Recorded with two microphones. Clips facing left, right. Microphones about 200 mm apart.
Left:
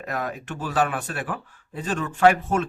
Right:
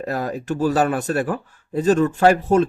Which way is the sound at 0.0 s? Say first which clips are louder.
Right 5 dB; 35° right (ahead or behind).